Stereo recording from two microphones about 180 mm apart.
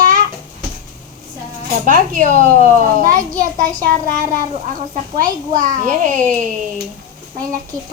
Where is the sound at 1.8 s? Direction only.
45° right (ahead or behind).